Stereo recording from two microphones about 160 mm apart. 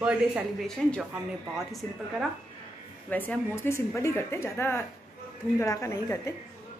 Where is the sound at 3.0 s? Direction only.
10° left (ahead or behind).